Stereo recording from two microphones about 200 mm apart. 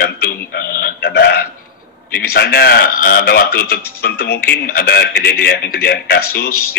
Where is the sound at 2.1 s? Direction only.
55° left (ahead or behind).